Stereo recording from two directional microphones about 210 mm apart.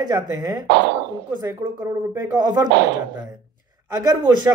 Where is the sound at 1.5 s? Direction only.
10° right (ahead or behind).